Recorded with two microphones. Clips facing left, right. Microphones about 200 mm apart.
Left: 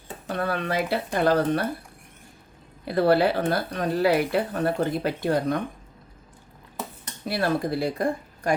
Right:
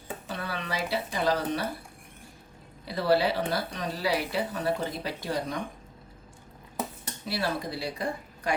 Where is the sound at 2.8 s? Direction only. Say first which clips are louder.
Left 5 dB; 55° left (ahead or behind).